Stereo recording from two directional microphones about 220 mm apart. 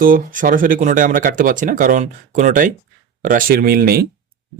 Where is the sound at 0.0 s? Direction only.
40° right (ahead or behind).